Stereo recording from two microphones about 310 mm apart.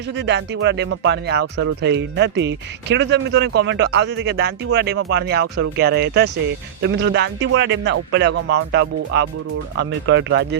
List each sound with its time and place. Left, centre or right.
0.2 s speech: right
8.3 s speech: right
8.7 s speech: right